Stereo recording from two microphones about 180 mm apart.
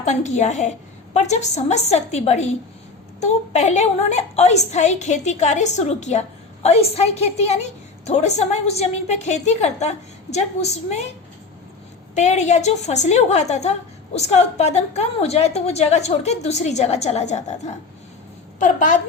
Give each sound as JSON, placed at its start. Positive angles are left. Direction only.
{"t": 0.0, "sound": "a woman's voice", "side_deg": 40}
{"t": 12.1, "sound": "a woman's voice", "side_deg": 40}